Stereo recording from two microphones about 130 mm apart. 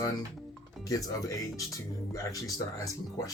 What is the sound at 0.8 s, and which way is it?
Speech, 25° left (ahead or behind).